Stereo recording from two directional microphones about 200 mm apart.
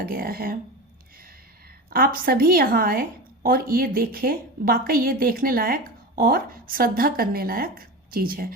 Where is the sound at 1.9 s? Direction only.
45° right (ahead or behind).